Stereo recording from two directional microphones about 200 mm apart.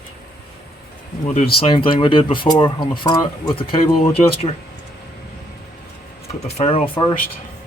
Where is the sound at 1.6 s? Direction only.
25° left (ahead or behind).